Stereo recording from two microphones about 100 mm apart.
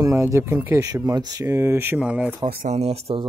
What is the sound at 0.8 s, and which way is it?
Speech, 40° right (ahead or behind).